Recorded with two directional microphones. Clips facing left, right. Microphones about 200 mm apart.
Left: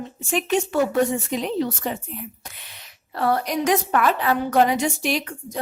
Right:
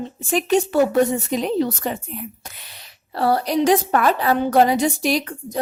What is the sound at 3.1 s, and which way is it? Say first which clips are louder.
A woman's voice: right 3 dB; 30° right (ahead or behind).